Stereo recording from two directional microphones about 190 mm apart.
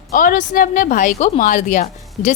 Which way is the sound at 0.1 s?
45° left (ahead or behind).